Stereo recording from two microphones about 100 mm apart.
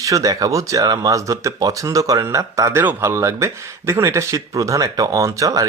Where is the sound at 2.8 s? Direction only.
20° right (ahead or behind).